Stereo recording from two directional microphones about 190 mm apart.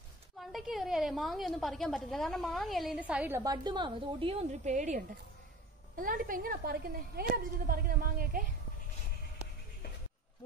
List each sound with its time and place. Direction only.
0.4 s a woman's voice: centre (ahead or behind); by 8.5 s 50° right (ahead or behind)